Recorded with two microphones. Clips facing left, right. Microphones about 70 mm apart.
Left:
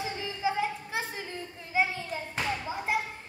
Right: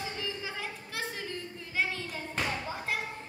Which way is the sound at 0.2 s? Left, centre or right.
Centre.